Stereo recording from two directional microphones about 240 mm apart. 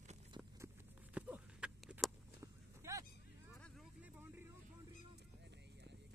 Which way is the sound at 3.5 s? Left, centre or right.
Centre.